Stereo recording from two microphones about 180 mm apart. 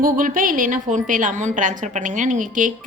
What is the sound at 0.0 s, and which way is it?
A woman's voice, 50° right (ahead or behind).